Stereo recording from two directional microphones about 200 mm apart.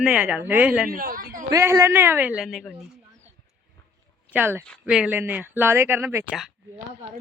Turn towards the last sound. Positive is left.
turn(degrees=-5)  # may be behind; listen again after turning